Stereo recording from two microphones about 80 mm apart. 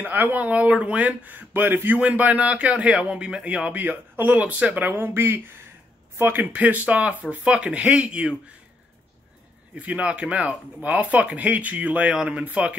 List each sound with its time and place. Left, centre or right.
0.0 s a man's voice: right
9.8 s a man's voice: centre